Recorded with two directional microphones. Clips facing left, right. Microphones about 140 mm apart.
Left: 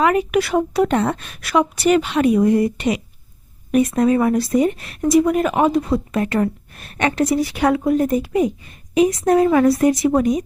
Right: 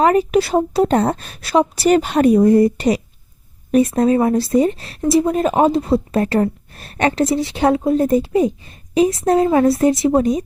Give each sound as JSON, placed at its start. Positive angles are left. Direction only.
{"t": 0.0, "sound": "speech", "side_deg": -35}